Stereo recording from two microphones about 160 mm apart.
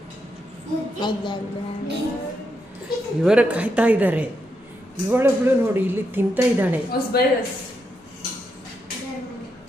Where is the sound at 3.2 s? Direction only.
5° right (ahead or behind).